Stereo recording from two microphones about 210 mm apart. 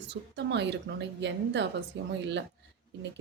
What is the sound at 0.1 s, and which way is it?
Speech, 55° right (ahead or behind).